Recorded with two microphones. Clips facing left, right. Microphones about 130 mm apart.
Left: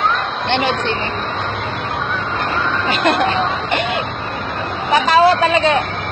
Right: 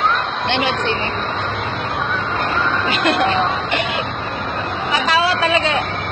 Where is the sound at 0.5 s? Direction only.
45° left (ahead or behind).